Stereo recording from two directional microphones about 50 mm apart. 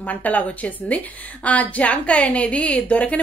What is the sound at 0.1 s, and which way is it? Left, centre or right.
A woman's voice, left.